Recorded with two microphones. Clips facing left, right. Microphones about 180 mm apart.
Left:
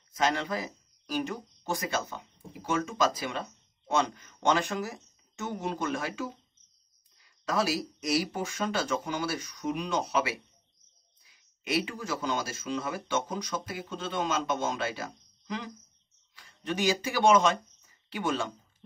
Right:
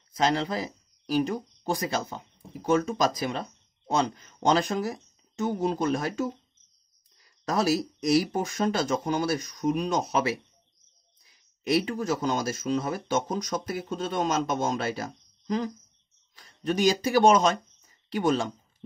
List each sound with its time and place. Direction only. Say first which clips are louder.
0.1 s speech: right 3 dB; 35° right (ahead or behind)
7.4 s speech: right 4 dB; 40° right (ahead or behind)